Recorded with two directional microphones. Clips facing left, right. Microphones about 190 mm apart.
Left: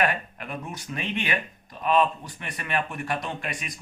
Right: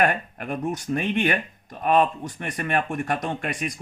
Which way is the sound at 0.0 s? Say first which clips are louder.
Right 3 dB; 50° right (ahead or behind).